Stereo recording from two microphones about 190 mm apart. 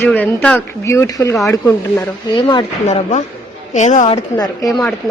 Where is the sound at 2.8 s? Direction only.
35° left (ahead or behind).